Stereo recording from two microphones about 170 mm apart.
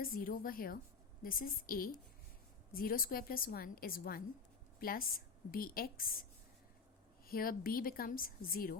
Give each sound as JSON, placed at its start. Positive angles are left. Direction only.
{"t": 0.0, "sound": "a woman's voice", "side_deg": 55}
{"t": 7.3, "sound": "a woman's voice", "side_deg": 60}